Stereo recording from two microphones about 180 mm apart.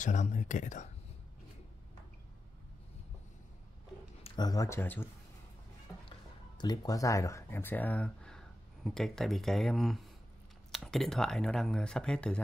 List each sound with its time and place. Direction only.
0.0 s speech: 40° left (ahead or behind)
4.2 s speech: 20° left (ahead or behind)
6.6 s speech: 20° left (ahead or behind); by 12.4 s 5° left (ahead or behind)